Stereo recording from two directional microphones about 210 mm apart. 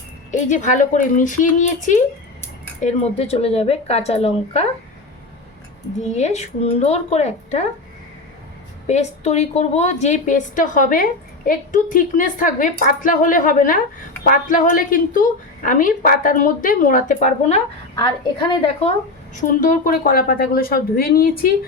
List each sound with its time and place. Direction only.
0.3 s a woman's voice: 35° left (ahead or behind)
6.0 s a woman's voice: 30° left (ahead or behind)
8.9 s a woman's voice: 30° left (ahead or behind)
17.9 s a woman's voice: 20° left (ahead or behind); by 21.5 s 45° left (ahead or behind)